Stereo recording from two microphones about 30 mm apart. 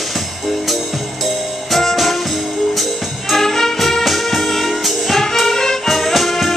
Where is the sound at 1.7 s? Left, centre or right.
Centre.